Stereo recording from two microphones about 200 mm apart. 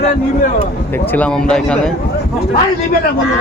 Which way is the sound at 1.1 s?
5° left (ahead or behind).